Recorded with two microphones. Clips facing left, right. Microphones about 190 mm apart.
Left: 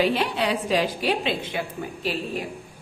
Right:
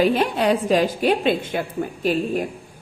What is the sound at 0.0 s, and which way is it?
Speech, 45° right (ahead or behind).